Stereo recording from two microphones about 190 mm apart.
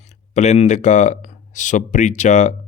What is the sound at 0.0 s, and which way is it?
Speech, 35° left (ahead or behind).